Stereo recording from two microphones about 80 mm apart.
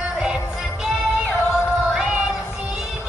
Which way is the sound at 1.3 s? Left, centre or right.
Left.